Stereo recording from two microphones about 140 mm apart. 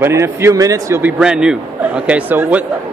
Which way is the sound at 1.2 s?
5° right (ahead or behind).